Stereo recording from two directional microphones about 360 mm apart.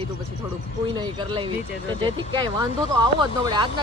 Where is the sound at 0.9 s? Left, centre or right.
Centre.